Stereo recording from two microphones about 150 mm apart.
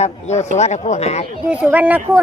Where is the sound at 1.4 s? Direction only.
10° right (ahead or behind).